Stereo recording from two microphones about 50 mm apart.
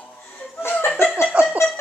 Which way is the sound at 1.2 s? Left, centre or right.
Centre.